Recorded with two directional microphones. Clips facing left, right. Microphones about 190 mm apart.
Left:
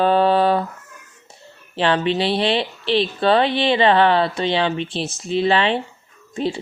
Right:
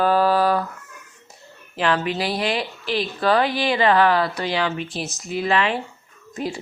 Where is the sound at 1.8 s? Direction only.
30° left (ahead or behind).